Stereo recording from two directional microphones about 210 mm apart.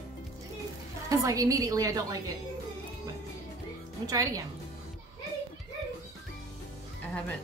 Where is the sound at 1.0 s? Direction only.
15° right (ahead or behind).